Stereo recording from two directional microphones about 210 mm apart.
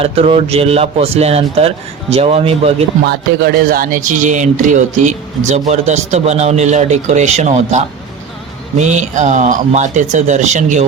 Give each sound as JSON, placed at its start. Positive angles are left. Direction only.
{"t": 0.0, "sound": "a man's voice", "side_deg": -25}
{"t": 3.1, "sound": "a man's voice", "side_deg": -45}